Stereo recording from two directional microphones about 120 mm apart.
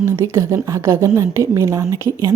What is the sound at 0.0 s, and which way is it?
A woman's voice, 20° right (ahead or behind).